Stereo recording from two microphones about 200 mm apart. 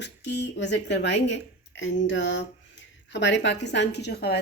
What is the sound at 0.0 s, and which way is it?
A woman's voice, 60° left (ahead or behind).